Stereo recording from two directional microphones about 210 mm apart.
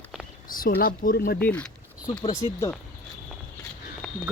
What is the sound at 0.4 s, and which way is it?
Speech, 40° left (ahead or behind).